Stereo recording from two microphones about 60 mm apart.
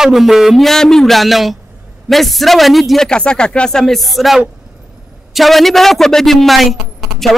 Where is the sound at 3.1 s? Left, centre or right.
Centre.